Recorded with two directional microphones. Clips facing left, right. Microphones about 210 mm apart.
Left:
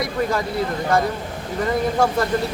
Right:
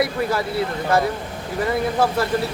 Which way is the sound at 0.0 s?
5° right (ahead or behind).